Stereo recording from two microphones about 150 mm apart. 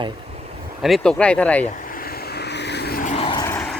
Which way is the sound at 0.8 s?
Centre (ahead or behind).